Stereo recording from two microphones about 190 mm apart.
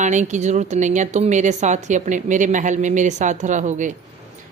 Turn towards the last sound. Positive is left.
turn(degrees=-40)  # may be behind; listen again after turning